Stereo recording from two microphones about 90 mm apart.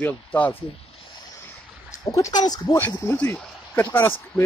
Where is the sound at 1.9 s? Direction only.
35° left (ahead or behind).